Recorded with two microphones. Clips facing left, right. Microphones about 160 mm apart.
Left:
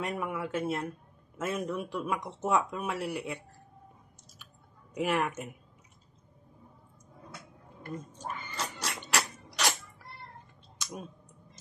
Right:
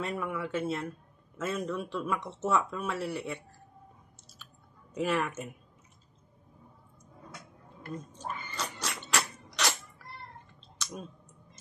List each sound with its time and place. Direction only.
0.0 s speech: 15° left (ahead or behind)
4.9 s speech: 15° left (ahead or behind)
7.9 s a sound: 10° left (ahead or behind)